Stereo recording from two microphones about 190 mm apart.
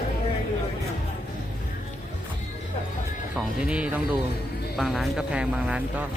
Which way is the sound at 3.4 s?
5° right (ahead or behind).